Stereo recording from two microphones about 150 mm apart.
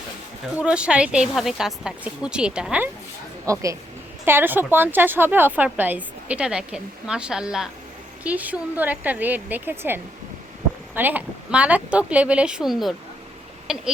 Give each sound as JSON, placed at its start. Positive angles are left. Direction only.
{"t": 0.6, "sound": "a woman's voice", "side_deg": -5}
{"t": 3.4, "sound": "a woman's voice", "side_deg": -20}